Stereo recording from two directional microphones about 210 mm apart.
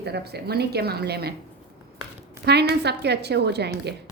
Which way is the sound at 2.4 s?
50° right (ahead or behind).